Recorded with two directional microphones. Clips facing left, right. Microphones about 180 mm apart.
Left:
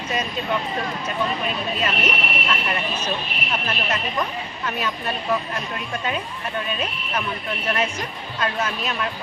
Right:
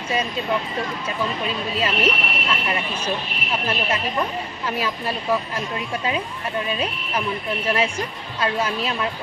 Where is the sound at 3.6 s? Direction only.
30° right (ahead or behind).